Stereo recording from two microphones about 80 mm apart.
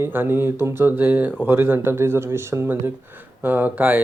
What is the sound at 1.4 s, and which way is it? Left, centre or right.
Speech, right.